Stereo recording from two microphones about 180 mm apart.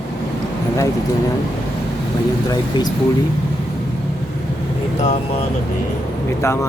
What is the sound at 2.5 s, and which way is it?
Speech, 20° left (ahead or behind).